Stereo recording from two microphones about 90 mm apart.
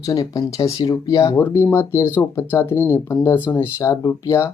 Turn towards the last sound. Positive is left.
turn(degrees=30)  # may be behind; listen again after turning